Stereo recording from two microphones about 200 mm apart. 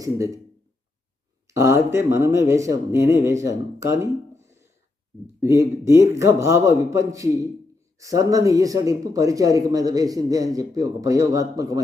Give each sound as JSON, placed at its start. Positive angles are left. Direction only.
{"t": 0.0, "sound": "speech", "side_deg": -15}
{"t": 1.5, "sound": "speech", "side_deg": -15}